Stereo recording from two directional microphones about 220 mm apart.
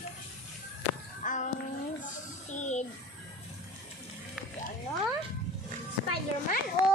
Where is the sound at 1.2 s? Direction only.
35° left (ahead or behind).